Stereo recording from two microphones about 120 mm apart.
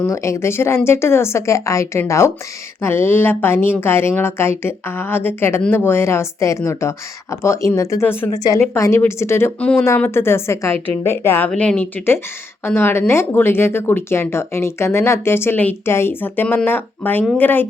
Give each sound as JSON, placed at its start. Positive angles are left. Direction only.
{"t": 0.0, "sound": "speech", "side_deg": 25}
{"t": 8.3, "sound": "a woman's voice", "side_deg": 30}